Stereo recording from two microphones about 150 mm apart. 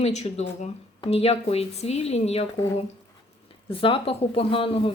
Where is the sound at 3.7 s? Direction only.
35° left (ahead or behind).